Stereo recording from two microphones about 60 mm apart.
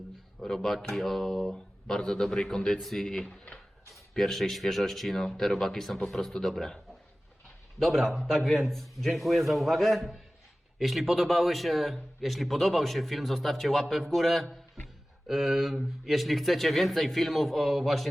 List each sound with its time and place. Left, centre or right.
0.3 s speech: centre
3.2 s a sound: left
4.1 s a man's voice: centre
7.8 s a man's voice: centre